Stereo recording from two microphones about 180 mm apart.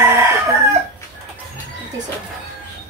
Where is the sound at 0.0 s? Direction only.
15° right (ahead or behind).